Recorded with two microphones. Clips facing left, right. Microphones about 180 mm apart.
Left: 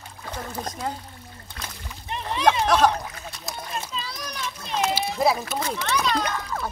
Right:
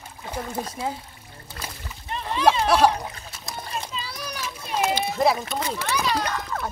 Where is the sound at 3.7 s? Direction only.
5° right (ahead or behind).